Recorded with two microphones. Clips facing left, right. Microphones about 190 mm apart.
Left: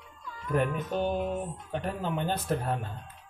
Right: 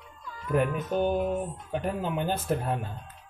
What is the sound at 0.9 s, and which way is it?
A man's voice, 5° right (ahead or behind).